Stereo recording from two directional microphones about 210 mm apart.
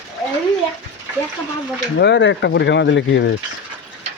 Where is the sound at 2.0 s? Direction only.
55° left (ahead or behind).